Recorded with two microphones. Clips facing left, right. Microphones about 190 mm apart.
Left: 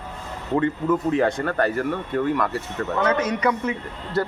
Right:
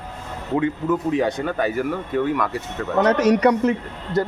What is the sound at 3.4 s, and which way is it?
Speech, 40° right (ahead or behind).